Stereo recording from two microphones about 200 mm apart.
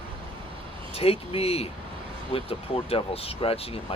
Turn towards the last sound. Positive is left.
turn(degrees=30)  # may be behind; listen again after turning